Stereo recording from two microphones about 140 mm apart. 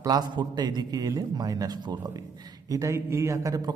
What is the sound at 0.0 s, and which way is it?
A man's voice, 30° right (ahead or behind).